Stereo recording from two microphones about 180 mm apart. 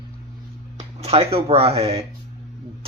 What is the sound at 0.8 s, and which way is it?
Speech, 35° right (ahead or behind).